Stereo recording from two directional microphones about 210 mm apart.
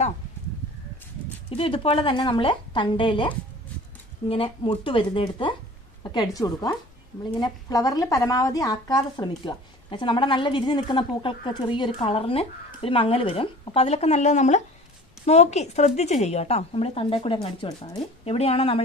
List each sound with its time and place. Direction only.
1.5 s speech: 25° left (ahead or behind)